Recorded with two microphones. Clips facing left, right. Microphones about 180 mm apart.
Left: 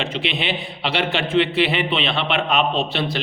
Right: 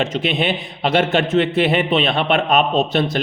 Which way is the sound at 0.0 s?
45° right (ahead or behind).